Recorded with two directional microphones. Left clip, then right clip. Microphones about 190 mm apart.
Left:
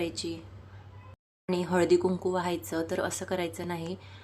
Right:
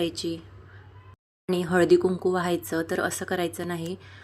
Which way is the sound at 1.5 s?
15° right (ahead or behind).